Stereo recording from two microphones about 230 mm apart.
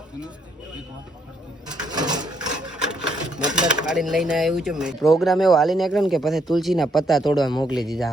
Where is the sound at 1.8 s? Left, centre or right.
Centre.